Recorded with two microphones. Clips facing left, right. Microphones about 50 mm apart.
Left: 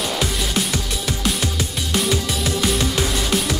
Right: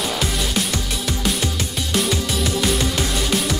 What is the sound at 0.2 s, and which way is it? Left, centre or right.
Music, centre.